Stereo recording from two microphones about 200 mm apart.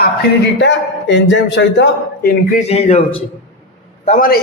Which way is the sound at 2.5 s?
30° left (ahead or behind).